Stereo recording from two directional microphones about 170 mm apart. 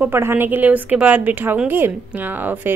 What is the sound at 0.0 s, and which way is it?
Speech, 15° right (ahead or behind).